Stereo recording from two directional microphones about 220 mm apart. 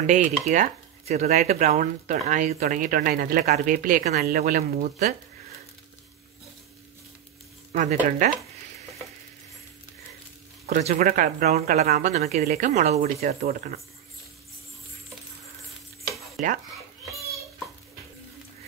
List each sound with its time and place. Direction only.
0.0 s speech: 35° right (ahead or behind)
7.7 s speech: 35° right (ahead or behind)
10.7 s speech: 30° right (ahead or behind)
12.1 s speech: 30° right (ahead or behind)
16.3 s speech: 35° right (ahead or behind)